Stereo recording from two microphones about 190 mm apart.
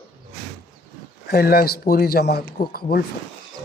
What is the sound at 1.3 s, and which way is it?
Speech, 55° left (ahead or behind).